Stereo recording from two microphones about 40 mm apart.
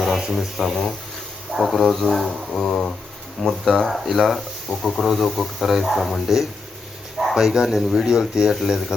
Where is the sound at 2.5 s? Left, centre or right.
Centre.